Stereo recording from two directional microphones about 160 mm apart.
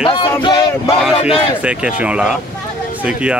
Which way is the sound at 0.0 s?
35° left (ahead or behind).